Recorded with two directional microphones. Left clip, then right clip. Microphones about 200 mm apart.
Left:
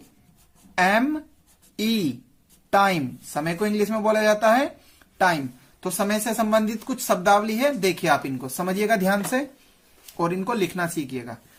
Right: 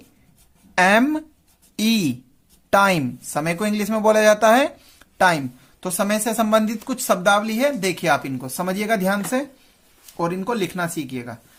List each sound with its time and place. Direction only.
0.8 s a man's voice: 40° right (ahead or behind)